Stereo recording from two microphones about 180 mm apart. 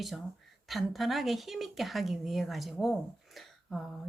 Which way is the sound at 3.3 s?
Centre (ahead or behind).